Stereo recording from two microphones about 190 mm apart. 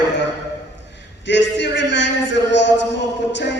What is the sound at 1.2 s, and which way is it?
A man's voice, 65° left (ahead or behind).